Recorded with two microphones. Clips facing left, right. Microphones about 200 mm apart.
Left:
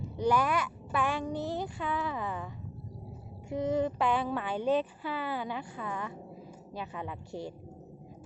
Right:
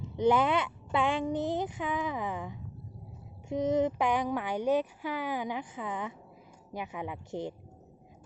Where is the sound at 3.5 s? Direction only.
20° right (ahead or behind).